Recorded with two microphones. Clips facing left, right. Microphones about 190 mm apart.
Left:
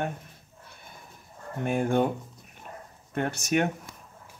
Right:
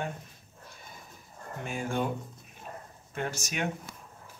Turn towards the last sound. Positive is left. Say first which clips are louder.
# left 7 dB
turn(degrees=55)  # may be behind; listen again after turning